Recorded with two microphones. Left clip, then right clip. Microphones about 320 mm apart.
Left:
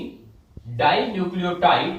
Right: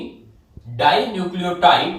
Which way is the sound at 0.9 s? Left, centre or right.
Right.